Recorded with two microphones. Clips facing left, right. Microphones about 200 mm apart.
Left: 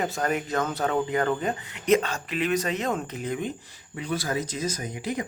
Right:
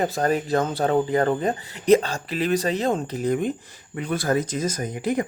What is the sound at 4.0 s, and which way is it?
A man's voice, 55° right (ahead or behind).